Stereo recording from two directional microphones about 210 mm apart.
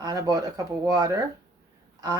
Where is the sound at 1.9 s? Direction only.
15° right (ahead or behind).